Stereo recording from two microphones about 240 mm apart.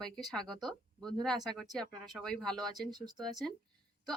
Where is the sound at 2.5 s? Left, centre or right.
Centre.